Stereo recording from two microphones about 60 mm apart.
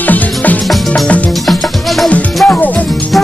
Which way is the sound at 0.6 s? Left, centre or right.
Centre.